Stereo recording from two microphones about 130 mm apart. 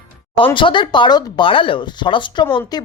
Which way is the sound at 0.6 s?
40° left (ahead or behind).